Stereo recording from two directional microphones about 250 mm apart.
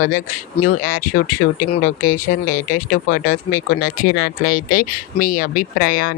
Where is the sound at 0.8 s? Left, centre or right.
Left.